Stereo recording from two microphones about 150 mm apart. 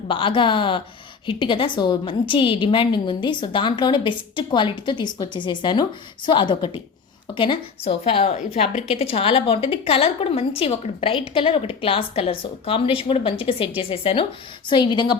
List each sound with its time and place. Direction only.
0.1 s a woman's voice: 35° left (ahead or behind)